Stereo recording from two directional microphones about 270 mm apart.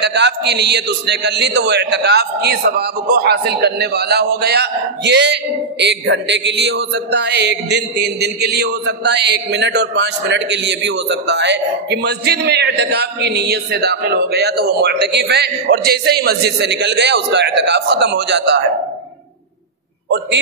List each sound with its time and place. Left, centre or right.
0.0 s a man's voice: right